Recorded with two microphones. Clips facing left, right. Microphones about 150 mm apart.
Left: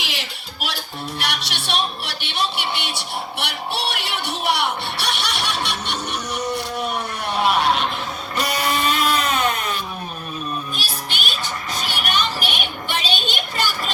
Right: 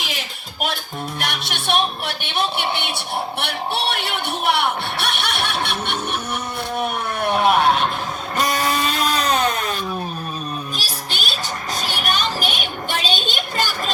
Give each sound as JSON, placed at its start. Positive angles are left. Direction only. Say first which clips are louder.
{"t": 0.0, "sound": "music", "louder": "right 1 dB", "side_deg": -50}
{"t": 1.2, "sound": "speech", "louder": "even", "side_deg": -50}
{"t": 3.4, "sound": "music", "louder": "right 3 dB", "side_deg": -55}
{"t": 6.7, "sound": "a sound", "louder": "right 2 dB", "side_deg": -55}
{"t": 10.8, "sound": "music", "louder": "even", "side_deg": -40}
{"t": 11.8, "sound": "a sound", "louder": "even", "side_deg": -40}